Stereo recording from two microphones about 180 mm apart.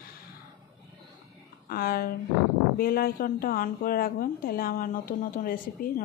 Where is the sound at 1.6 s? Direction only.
55° left (ahead or behind).